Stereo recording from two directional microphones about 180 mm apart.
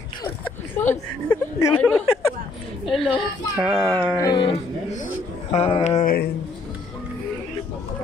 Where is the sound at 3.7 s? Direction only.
25° right (ahead or behind).